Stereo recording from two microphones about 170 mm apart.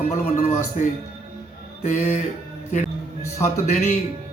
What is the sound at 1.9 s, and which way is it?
Speech, 45° left (ahead or behind).